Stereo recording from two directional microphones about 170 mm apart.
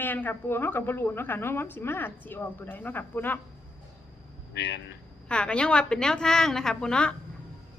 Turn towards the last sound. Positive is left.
turn(degrees=5)  # may be behind; listen again after turning